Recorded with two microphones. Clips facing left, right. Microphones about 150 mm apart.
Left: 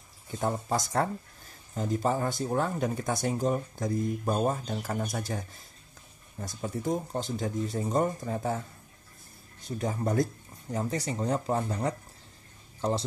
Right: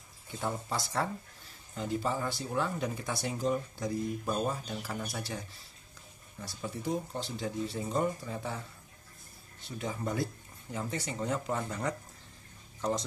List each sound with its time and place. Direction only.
0.4 s speech: 40° left (ahead or behind)